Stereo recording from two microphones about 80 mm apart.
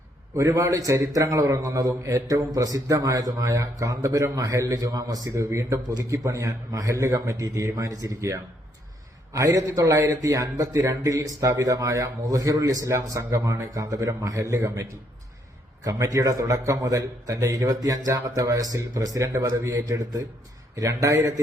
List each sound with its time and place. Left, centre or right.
0.3 s a man's voice: right